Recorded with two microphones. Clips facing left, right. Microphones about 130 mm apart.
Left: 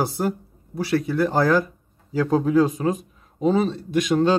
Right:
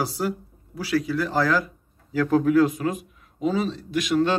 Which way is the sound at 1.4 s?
50° left (ahead or behind).